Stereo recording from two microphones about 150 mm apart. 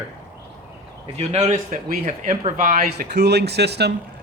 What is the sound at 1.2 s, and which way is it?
Speech, 50° right (ahead or behind).